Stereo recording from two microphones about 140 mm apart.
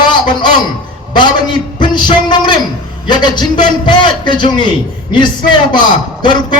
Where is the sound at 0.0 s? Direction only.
35° left (ahead or behind).